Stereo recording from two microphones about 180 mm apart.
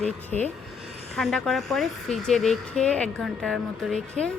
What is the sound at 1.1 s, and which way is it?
Speech, 5° left (ahead or behind).